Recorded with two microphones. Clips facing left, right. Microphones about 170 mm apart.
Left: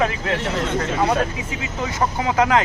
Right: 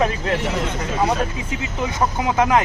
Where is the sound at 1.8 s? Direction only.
15° right (ahead or behind).